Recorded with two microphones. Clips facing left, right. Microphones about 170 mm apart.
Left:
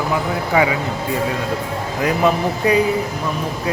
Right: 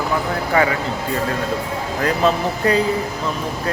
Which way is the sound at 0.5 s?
10° left (ahead or behind).